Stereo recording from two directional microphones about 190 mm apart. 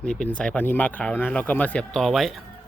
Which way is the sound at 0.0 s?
5° left (ahead or behind).